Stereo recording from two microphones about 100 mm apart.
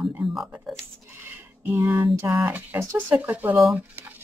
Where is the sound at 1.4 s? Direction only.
20° right (ahead or behind).